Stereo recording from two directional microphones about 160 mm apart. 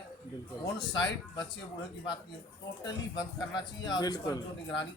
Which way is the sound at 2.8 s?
25° left (ahead or behind).